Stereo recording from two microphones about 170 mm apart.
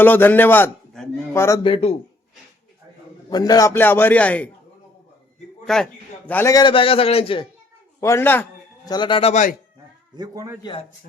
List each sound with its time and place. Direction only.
0.0 s a man's voice: 10° left (ahead or behind)
1.6 s a man's voice: 35° left (ahead or behind)
3.2 s a man's voice: 25° left (ahead or behind); by 4.4 s 10° left (ahead or behind)
5.6 s a man's voice: 5° left (ahead or behind); by 7.4 s 35° left (ahead or behind)
8.0 s a man's voice: 15° left (ahead or behind)
8.9 s a man's voice: 30° left (ahead or behind); by 9.6 s 45° left (ahead or behind)
10.2 s a man's voice: 20° right (ahead or behind)
10.6 s a man's voice: 30° left (ahead or behind)